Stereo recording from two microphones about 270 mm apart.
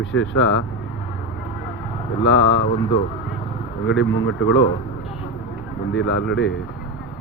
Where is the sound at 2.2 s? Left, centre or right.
Left.